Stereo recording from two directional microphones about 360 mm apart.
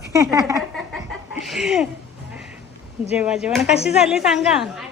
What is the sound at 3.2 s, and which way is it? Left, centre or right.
A man's voice, centre.